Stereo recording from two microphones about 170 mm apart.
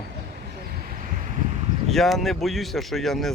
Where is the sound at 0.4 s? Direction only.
60° right (ahead or behind).